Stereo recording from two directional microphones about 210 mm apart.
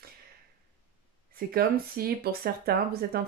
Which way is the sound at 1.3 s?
45° right (ahead or behind).